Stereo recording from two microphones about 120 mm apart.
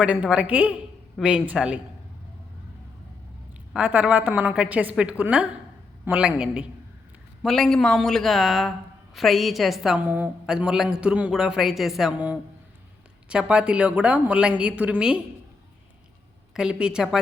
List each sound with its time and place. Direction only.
0.0 s a woman's voice: 10° right (ahead or behind)
3.8 s a woman's voice: 10° right (ahead or behind)
7.4 s a man's voice: 5° left (ahead or behind)
10.0 s a man's voice: 15° right (ahead or behind)
16.6 s a woman's voice: 5° right (ahead or behind)